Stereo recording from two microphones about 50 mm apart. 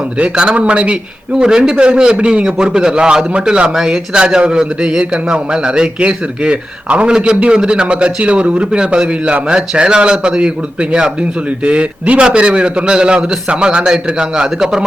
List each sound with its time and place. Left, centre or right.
0.2 s a man's voice: right